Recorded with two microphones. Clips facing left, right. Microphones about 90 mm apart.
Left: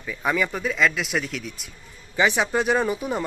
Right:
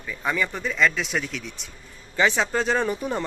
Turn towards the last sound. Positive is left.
turn(degrees=5)  # may be behind; listen again after turning